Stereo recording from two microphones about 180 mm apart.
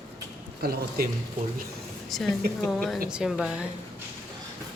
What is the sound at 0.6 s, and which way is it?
Speech, 55° right (ahead or behind).